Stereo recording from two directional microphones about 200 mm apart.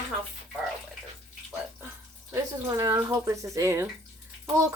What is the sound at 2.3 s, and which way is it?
Speech, 15° right (ahead or behind).